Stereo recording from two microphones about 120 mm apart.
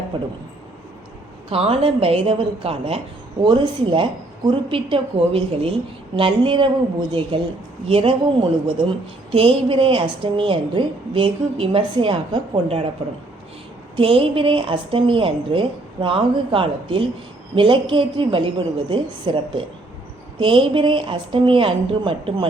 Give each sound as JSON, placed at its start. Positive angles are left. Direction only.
{"t": 0.1, "sound": "speech", "side_deg": -40}
{"t": 1.5, "sound": "a woman's voice", "side_deg": -55}
{"t": 3.4, "sound": "a woman's voice", "side_deg": -40}
{"t": 13.9, "sound": "a woman's voice", "side_deg": -50}